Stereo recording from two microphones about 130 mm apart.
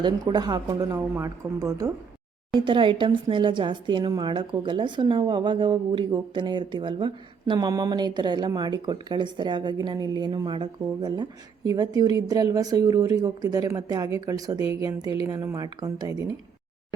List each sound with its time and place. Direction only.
0.0 s speech: 35° right (ahead or behind)
2.6 s speech: 40° right (ahead or behind)